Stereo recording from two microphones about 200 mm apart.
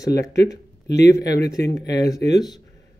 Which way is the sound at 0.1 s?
55° left (ahead or behind).